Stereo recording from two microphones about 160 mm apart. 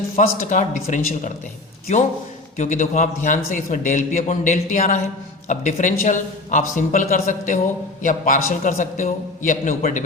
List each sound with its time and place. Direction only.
0.2 s a man's voice: 50° left (ahead or behind)
2.6 s a man's voice: 50° left (ahead or behind)